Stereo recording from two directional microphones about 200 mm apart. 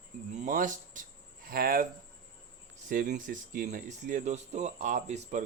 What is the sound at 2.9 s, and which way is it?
Speech, 40° right (ahead or behind).